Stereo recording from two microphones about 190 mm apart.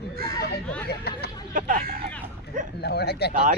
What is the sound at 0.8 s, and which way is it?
Speech, 55° left (ahead or behind).